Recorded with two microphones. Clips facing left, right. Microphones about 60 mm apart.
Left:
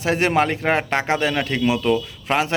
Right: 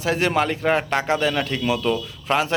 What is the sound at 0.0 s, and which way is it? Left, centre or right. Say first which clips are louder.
A man's voice: left 2 dB; left.